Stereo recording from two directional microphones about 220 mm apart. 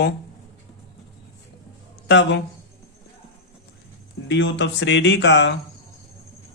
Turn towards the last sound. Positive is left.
turn(degrees=50)  # may be behind; listen again after turning